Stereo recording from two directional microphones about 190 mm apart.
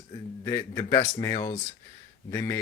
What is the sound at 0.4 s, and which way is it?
Speech, 20° left (ahead or behind).